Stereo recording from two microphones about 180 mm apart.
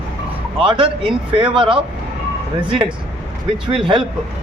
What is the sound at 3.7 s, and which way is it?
Speech, 30° right (ahead or behind).